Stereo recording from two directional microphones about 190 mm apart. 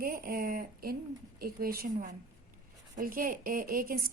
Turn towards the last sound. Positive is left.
turn(degrees=-50)  # may be behind; listen again after turning